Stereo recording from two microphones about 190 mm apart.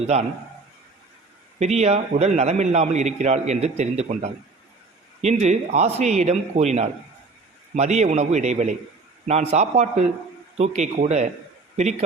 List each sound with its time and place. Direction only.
0.0 s a man's voice: 35° right (ahead or behind)
1.5 s a man's voice: 35° right (ahead or behind)